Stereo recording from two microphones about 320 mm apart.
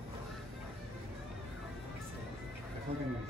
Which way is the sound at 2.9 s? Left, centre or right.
Centre.